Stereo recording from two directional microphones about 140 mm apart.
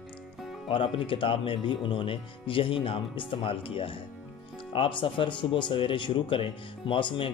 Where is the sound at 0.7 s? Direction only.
35° left (ahead or behind).